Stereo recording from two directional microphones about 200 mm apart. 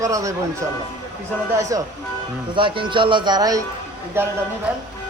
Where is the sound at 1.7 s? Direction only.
15° right (ahead or behind).